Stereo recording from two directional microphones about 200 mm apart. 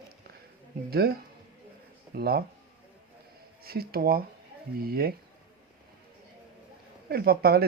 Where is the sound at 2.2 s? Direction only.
50° right (ahead or behind).